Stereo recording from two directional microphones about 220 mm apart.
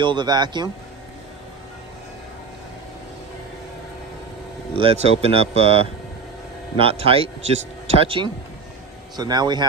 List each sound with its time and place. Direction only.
0.0 s speech: 20° right (ahead or behind)
4.8 s speech: 25° right (ahead or behind)